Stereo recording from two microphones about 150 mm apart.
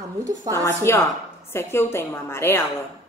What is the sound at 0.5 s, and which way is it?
A man's voice, 15° left (ahead or behind).